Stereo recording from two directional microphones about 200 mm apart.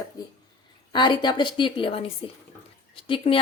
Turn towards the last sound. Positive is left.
turn(degrees=25)  # may be behind; listen again after turning